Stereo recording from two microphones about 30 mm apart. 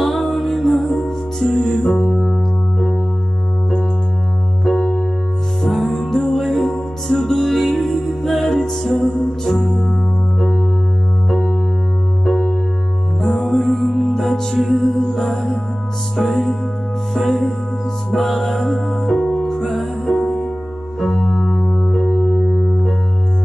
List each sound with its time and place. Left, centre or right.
0.0 s music: centre
0.8 s music: centre
4.7 s keyboard: centre
5.6 s music: centre
9.0 s music: left
9.4 s music: centre
13.2 s music: centre
21.0 s keyboard: centre
21.7 s music: centre